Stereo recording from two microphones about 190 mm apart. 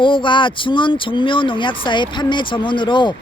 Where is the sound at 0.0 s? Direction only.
25° left (ahead or behind).